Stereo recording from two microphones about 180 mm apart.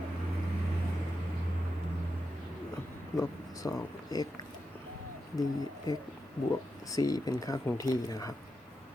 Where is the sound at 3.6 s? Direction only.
20° left (ahead or behind).